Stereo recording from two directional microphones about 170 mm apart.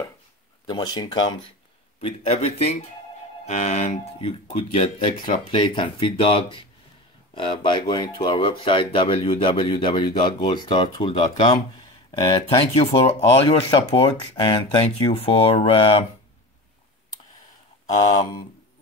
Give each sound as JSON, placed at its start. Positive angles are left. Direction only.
{"t": 0.7, "sound": "speech", "side_deg": 25}